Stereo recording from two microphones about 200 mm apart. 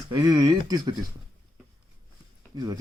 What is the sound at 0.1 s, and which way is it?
Speech, 20° right (ahead or behind).